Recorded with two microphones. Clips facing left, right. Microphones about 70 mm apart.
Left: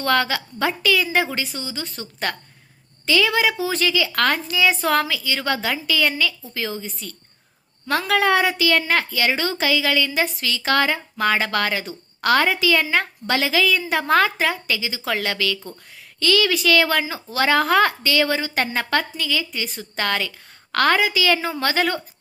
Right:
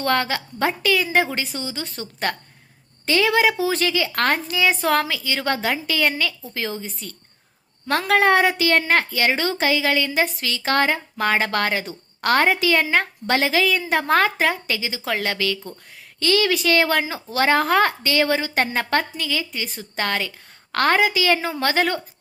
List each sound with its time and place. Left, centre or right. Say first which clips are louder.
0.0 s a woman's voice: left 1 dB; right
15.1 s a woman's voice: even; right